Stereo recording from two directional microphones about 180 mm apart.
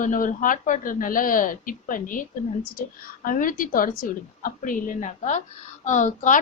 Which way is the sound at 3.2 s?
50° left (ahead or behind).